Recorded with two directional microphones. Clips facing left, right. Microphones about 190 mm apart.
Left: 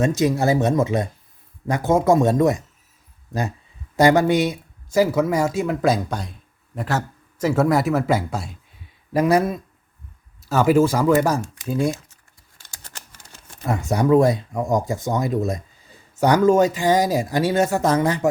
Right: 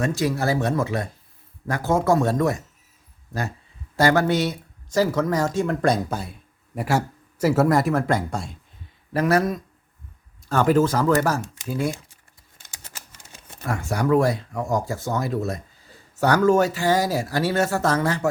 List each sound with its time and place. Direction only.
0.0 s speech: 20° left (ahead or behind)
3.9 s speech: 15° left (ahead or behind)
9.1 s speech: 15° left (ahead or behind)
13.7 s speech: 20° left (ahead or behind)